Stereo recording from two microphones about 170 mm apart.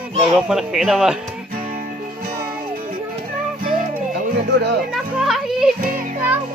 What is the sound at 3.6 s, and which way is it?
Music, 50° right (ahead or behind).